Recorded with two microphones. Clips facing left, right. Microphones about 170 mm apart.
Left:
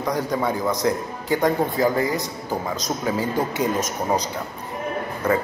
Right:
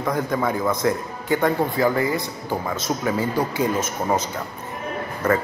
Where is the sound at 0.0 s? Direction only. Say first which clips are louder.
Even; 15° left (ahead or behind).